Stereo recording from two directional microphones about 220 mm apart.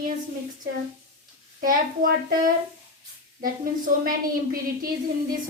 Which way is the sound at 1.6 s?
40° right (ahead or behind).